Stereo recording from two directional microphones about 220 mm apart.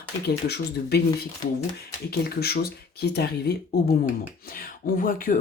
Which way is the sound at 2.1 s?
45° left (ahead or behind).